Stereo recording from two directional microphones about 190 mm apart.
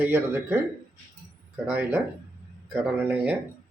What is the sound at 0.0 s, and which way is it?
Speech, 10° right (ahead or behind).